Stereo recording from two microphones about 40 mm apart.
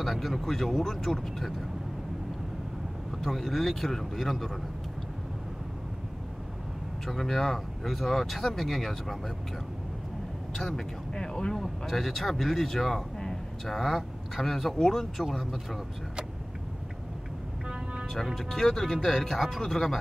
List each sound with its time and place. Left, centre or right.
0.0 s speech: centre
3.2 s speech: centre
7.1 s speech: centre
10.5 s speech: centre
11.5 s speech: centre
15.2 s speech: centre
18.1 s speech: centre